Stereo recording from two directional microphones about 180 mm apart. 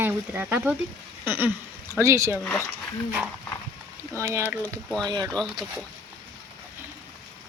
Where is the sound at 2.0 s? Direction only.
15° right (ahead or behind).